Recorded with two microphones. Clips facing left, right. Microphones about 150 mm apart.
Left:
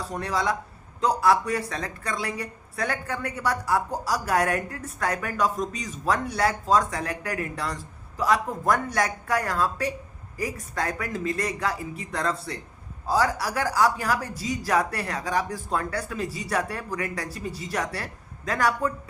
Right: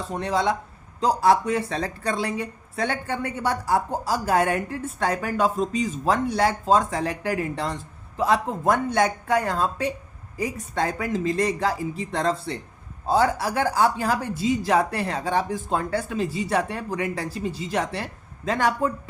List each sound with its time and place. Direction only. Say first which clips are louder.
0.1 s a woman's voice: right 4 dB; 25° right (ahead or behind)